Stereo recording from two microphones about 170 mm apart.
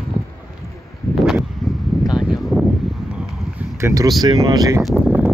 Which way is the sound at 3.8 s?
20° right (ahead or behind).